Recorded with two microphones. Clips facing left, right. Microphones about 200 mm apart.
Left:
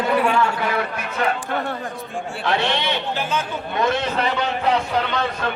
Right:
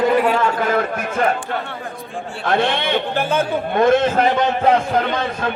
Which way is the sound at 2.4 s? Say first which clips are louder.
Right 3 dB; 50° right (ahead or behind).